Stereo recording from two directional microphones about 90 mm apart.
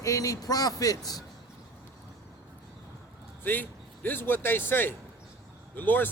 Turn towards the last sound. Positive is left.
turn(degrees=20)  # may be behind; listen again after turning